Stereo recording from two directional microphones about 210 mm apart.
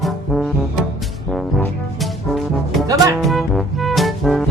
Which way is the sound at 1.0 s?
Centre (ahead or behind).